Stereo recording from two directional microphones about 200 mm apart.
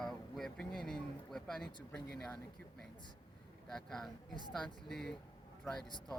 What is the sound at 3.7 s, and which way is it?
Speech, centre (ahead or behind).